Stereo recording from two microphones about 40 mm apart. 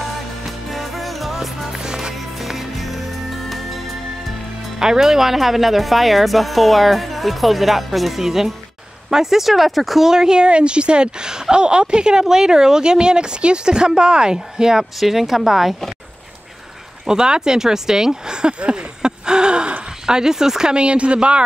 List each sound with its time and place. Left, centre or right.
0.7 s music: centre
4.7 s speech: centre
17.0 s speech: centre